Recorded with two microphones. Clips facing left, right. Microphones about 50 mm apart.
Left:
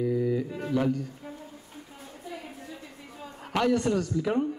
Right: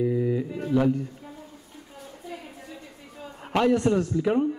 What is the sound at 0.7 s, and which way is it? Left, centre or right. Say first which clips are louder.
Speech: right 4 dB; centre.